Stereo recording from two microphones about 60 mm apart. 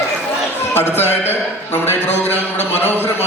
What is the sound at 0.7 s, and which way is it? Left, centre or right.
A man's voice, left.